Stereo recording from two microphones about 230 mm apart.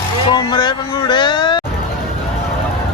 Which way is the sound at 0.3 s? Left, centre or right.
Centre.